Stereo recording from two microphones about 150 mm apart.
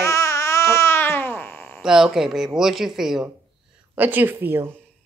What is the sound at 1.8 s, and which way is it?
A woman's voice, 5° right (ahead or behind).